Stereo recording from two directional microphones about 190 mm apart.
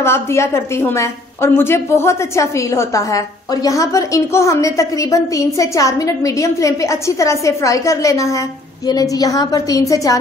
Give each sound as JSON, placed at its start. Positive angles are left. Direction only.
{"t": 0.0, "sound": "a woman's voice", "side_deg": 15}